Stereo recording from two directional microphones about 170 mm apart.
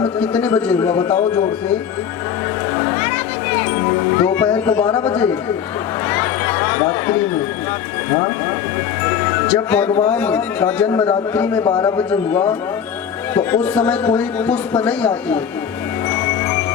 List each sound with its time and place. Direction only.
0.2 s a man's voice: 10° left (ahead or behind)
4.2 s a man's voice: 10° left (ahead or behind)
9.6 s a man's voice: 10° left (ahead or behind)
11.6 s speech: 25° left (ahead or behind)
11.9 s a man's voice: 10° left (ahead or behind)